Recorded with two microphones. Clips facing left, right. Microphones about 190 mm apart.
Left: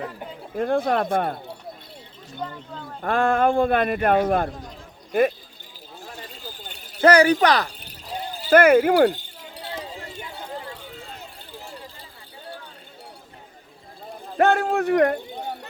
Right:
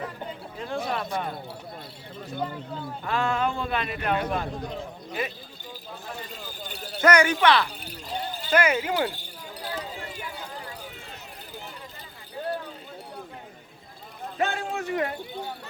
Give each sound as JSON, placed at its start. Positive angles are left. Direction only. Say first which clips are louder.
{"t": 0.5, "sound": "speech", "louder": "left 10 dB", "side_deg": 55}
{"t": 2.4, "sound": "speech", "louder": "right 1 dB", "side_deg": -10}
{"t": 3.0, "sound": "speech", "louder": "left 7 dB", "side_deg": 50}
{"t": 7.0, "sound": "speech", "louder": "left 5 dB", "side_deg": 35}
{"t": 8.4, "sound": "speech", "louder": "left 9 dB", "side_deg": 55}
{"t": 9.1, "sound": "a sound", "louder": "even", "side_deg": 25}
{"t": 14.3, "sound": "a sound", "louder": "left 9 dB", "side_deg": 60}